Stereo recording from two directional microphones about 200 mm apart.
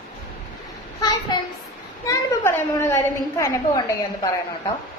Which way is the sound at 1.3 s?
20° left (ahead or behind).